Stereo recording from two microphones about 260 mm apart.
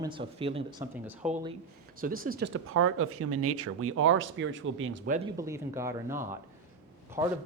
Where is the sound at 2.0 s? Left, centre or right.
Right.